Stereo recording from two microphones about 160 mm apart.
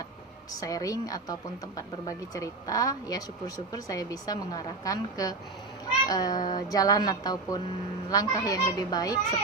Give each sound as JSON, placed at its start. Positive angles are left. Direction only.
{"t": 0.5, "sound": "a woman's voice", "side_deg": 20}